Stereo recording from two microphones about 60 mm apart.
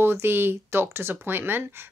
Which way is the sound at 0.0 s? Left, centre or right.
Right.